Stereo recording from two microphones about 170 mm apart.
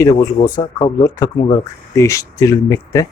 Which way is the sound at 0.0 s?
20° left (ahead or behind).